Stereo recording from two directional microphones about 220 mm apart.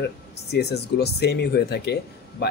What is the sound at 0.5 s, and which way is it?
Speech, 50° left (ahead or behind).